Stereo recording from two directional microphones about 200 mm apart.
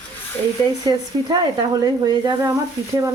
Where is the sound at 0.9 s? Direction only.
20° right (ahead or behind).